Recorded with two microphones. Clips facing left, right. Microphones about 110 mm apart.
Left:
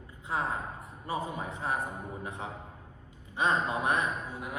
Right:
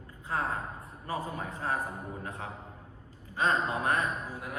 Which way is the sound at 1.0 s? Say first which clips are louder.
Left 1 dB; 20° left (ahead or behind).